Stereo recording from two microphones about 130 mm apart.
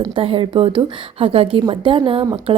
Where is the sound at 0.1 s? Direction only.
45° right (ahead or behind).